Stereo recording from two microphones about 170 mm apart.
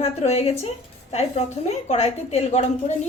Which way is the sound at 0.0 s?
40° left (ahead or behind).